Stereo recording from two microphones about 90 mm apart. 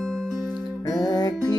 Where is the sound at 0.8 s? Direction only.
45° left (ahead or behind).